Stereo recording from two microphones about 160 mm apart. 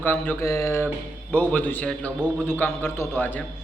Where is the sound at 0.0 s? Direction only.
10° left (ahead or behind).